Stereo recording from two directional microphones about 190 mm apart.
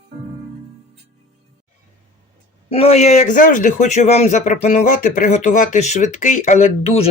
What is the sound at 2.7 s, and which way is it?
Speech, 30° left (ahead or behind).